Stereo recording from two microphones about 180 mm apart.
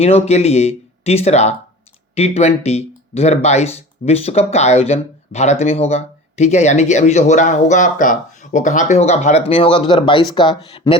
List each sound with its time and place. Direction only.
0.0 s speech: 35° left (ahead or behind)